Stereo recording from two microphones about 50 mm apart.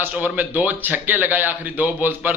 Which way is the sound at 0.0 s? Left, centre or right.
Right.